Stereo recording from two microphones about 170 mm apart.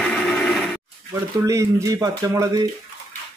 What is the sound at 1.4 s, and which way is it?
Speech, 20° right (ahead or behind).